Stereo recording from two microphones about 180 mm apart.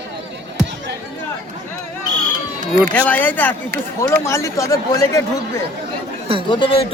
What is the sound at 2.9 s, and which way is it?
Speech, 10° left (ahead or behind).